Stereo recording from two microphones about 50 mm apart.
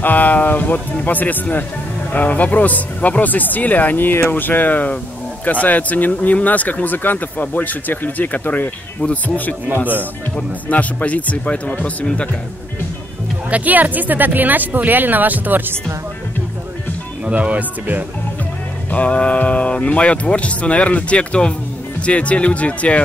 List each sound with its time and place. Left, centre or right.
0.0 s speech: left
13.5 s speech: right
17.2 s speech: right
18.9 s speech: left